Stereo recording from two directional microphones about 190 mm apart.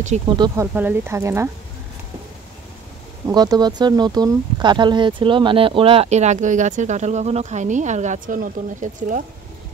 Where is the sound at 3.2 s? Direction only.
20° right (ahead or behind); by 9.2 s 40° right (ahead or behind).